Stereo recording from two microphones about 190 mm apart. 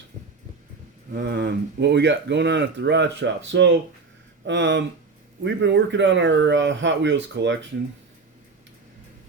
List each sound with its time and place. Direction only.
1.1 s speech: 55° right (ahead or behind)